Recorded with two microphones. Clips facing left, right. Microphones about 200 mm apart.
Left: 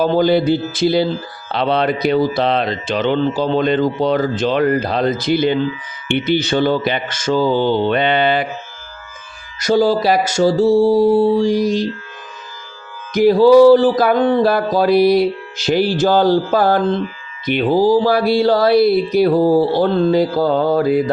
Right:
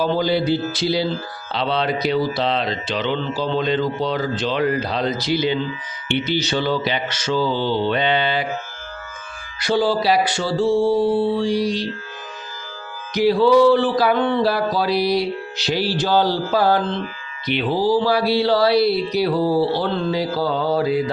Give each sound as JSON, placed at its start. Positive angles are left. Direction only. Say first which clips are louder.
{"t": 0.0, "sound": "speech", "louder": "left 5 dB", "side_deg": 50}
{"t": 9.6, "sound": "speech", "louder": "left 5 dB", "side_deg": 45}
{"t": 13.1, "sound": "speech", "louder": "left 6 dB", "side_deg": 45}